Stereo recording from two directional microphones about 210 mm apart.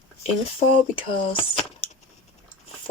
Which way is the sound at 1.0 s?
25° left (ahead or behind).